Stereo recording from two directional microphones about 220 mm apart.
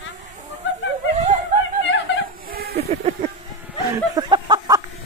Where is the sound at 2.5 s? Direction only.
45° right (ahead or behind).